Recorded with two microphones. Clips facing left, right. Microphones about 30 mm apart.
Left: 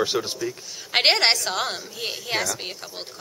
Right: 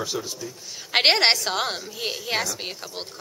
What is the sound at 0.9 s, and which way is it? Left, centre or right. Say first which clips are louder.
A woman's voice: even; centre.